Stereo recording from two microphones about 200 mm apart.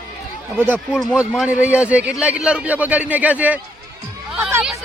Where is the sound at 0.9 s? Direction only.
Centre (ahead or behind).